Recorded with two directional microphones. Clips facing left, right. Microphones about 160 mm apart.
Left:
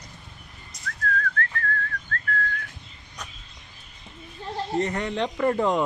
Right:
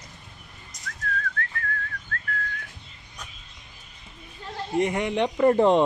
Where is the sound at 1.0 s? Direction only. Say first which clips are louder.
Left 4 dB; 20° right (ahead or behind).